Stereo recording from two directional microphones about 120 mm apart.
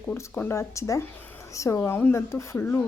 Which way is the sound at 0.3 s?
20° left (ahead or behind).